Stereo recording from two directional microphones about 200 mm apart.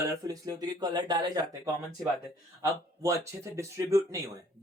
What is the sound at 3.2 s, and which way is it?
Speech, 15° right (ahead or behind).